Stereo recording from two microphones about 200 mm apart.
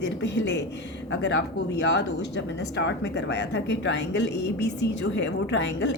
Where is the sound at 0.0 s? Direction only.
60° left (ahead or behind).